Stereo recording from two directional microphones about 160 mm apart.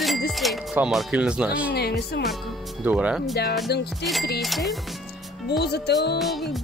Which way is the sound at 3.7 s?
90° left.